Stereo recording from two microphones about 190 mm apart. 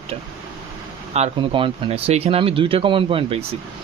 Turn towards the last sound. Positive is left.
turn(degrees=-30)  # may be behind; listen again after turning